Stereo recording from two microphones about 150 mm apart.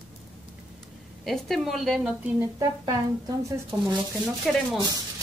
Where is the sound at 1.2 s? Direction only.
Centre (ahead or behind).